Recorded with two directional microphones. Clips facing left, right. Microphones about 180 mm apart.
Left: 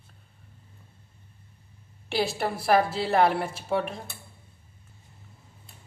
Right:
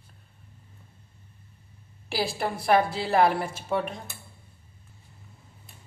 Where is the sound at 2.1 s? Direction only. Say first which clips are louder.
Left 1 dB; centre (ahead or behind).